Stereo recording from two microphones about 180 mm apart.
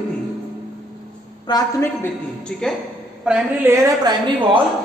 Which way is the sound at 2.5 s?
Centre (ahead or behind).